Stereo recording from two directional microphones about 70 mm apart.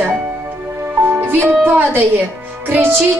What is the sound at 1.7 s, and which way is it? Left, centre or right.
Speech, right.